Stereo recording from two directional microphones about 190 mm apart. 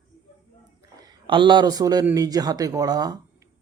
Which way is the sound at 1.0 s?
25° right (ahead or behind).